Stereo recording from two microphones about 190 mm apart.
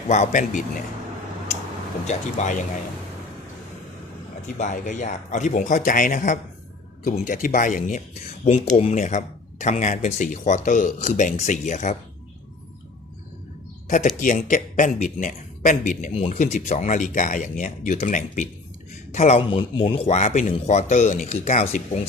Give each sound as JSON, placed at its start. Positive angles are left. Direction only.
{"t": 0.1, "sound": "speech", "side_deg": 40}
{"t": 2.0, "sound": "speech", "side_deg": 40}
{"t": 4.5, "sound": "speech", "side_deg": 40}
{"t": 13.8, "sound": "speech", "side_deg": 40}